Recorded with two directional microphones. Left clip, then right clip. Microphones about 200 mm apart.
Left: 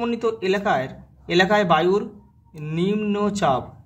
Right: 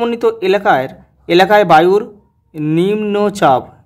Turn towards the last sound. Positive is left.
turn(degrees=-50)  # may be behind; listen again after turning